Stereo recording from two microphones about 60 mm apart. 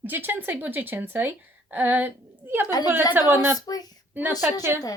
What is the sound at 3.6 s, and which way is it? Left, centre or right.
Speech, left.